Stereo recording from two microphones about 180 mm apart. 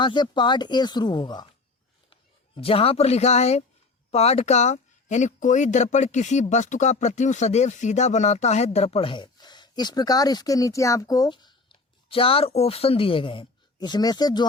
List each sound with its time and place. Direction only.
0.0 s speech: 25° left (ahead or behind)
2.6 s speech: 30° left (ahead or behind)